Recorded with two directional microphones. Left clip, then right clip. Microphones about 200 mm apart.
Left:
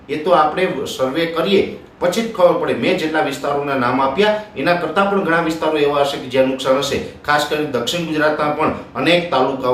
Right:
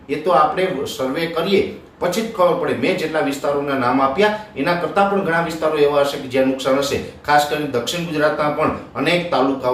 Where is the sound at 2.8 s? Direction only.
10° left (ahead or behind).